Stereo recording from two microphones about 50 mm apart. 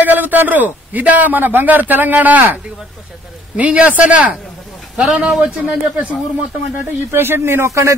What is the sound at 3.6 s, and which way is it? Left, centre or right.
Speech, right.